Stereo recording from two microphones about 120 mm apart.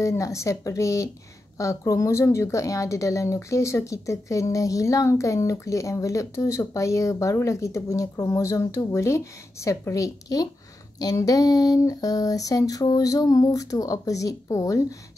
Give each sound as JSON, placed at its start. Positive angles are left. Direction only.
{"t": 0.0, "sound": "a woman's voice", "side_deg": 25}